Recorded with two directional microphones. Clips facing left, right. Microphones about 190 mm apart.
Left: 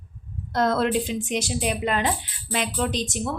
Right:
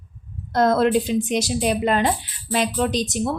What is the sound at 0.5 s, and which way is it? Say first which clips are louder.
A woman's voice: right 4 dB; 40° right (ahead or behind).